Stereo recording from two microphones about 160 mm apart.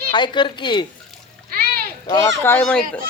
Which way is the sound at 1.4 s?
65° right (ahead or behind).